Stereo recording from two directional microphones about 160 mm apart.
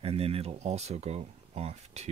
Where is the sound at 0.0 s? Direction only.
40° right (ahead or behind).